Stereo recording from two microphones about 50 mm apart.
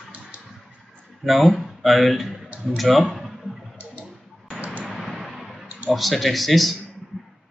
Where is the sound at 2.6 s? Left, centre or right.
Centre.